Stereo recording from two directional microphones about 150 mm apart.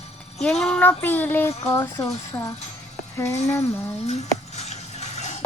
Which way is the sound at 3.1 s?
20° left (ahead or behind).